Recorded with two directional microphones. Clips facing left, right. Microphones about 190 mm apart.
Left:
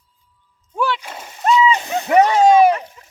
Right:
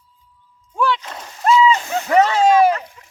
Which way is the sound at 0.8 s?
5° left (ahead or behind).